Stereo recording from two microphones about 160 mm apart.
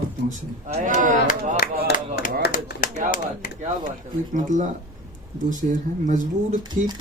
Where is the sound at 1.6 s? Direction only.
75° left (ahead or behind).